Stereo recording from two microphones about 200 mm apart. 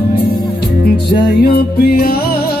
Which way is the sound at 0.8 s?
50° left (ahead or behind).